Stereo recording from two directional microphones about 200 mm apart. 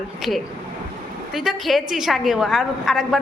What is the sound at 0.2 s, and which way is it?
A woman's voice, centre (ahead or behind).